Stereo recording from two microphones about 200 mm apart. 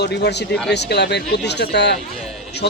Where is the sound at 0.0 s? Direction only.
55° left (ahead or behind).